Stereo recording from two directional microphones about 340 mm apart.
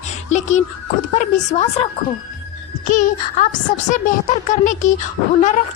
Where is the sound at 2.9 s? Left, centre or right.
Left.